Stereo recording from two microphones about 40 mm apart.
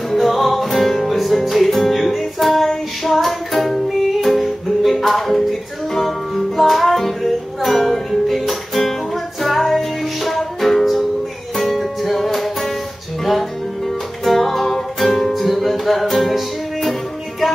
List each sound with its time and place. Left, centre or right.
0.2 s music: centre